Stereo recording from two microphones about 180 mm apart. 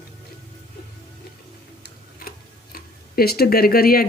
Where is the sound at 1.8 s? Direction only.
55° left (ahead or behind).